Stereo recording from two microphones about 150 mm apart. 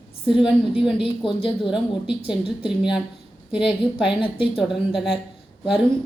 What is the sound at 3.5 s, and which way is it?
Speech, 35° left (ahead or behind).